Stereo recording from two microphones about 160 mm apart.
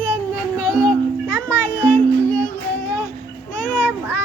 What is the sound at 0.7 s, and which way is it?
Music, 5° left (ahead or behind).